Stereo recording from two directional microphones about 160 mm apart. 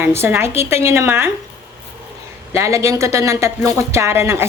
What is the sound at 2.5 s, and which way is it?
A woman's voice, 20° right (ahead or behind).